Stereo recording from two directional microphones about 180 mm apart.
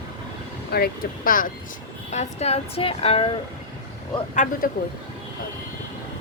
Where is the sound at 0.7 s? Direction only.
55° left (ahead or behind).